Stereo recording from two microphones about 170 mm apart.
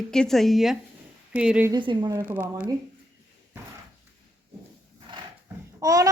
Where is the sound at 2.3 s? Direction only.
10° right (ahead or behind).